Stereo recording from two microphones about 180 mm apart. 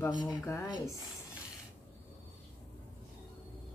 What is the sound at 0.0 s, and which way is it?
Speech, 25° left (ahead or behind).